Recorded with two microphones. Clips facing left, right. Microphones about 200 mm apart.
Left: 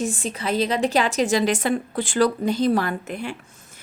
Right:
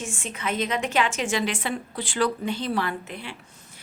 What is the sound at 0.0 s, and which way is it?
A woman's voice, 35° left (ahead or behind).